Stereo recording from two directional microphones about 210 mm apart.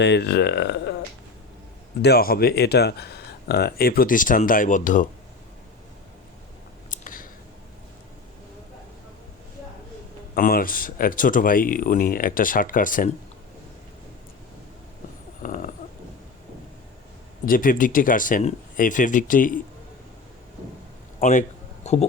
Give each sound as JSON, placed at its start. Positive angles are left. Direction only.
{"t": 0.0, "sound": "speech", "side_deg": 55}
{"t": 2.0, "sound": "speech", "side_deg": 50}
{"t": 6.9, "sound": "clicking", "side_deg": 40}
{"t": 10.3, "sound": "speech", "side_deg": 45}
{"t": 15.4, "sound": "dog", "side_deg": 40}
{"t": 17.4, "sound": "speech", "side_deg": 40}
{"t": 21.2, "sound": "a man's voice", "side_deg": 40}
{"t": 21.8, "sound": "a sound", "side_deg": 30}